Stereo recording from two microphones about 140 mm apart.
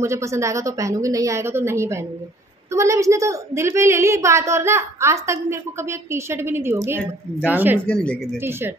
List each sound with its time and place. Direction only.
0.0 s a woman's voice: 20° right (ahead or behind)
7.8 s speech: 5° left (ahead or behind)
8.4 s speech: 15° right (ahead or behind)